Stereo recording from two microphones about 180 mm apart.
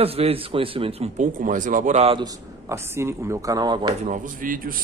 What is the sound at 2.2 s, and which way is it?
Speech, 20° right (ahead or behind).